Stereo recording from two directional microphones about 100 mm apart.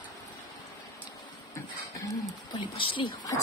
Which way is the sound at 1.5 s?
30° left (ahead or behind).